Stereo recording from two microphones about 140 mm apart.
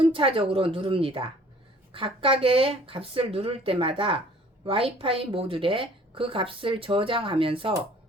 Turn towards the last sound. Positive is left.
turn(degrees=-40)  # may be behind; listen again after turning